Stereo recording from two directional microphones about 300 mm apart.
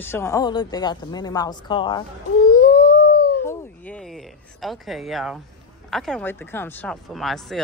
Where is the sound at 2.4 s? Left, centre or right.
Left.